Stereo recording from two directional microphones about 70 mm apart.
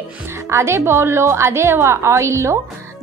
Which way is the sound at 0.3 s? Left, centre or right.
Right.